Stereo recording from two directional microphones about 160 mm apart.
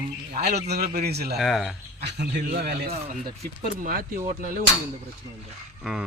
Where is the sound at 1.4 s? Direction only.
Centre (ahead or behind).